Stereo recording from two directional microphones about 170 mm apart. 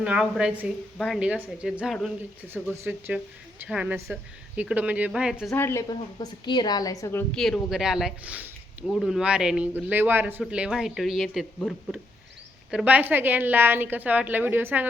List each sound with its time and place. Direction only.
0.0 s a woman's voice: 5° right (ahead or behind)
5.5 s a woman's voice: 15° left (ahead or behind)
5.9 s a woman's voice: 25° left (ahead or behind)
7.3 s a woman's voice: centre (ahead or behind)